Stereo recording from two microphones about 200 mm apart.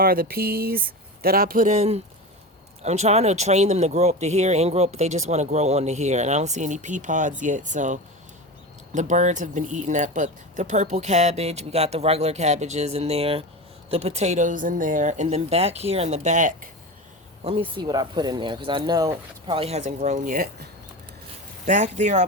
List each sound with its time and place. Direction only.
0.0 s speech: 45° right (ahead or behind)
17.4 s speech: 25° right (ahead or behind); by 20.7 s 45° right (ahead or behind)
21.7 s speech: 35° right (ahead or behind)